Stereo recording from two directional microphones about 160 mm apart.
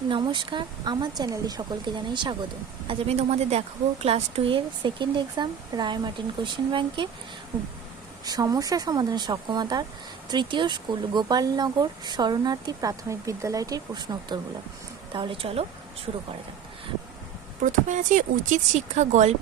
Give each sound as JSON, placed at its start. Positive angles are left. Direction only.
{"t": 0.1, "sound": "speech", "side_deg": -30}
{"t": 8.2, "sound": "speech", "side_deg": -25}
{"t": 17.7, "sound": "speech", "side_deg": -50}